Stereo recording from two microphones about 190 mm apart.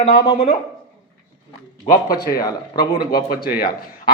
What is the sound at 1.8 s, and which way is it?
Speech, 50° left (ahead or behind).